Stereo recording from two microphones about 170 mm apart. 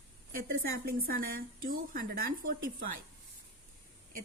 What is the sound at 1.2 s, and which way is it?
A woman's voice, 60° right (ahead or behind).